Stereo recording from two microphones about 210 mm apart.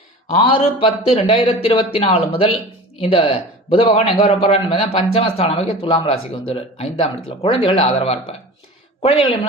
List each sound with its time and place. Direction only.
0.3 s a man's voice: 25° left (ahead or behind)